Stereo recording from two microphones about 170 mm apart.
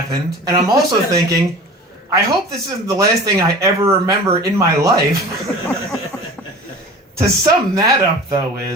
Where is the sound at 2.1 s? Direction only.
20° right (ahead or behind).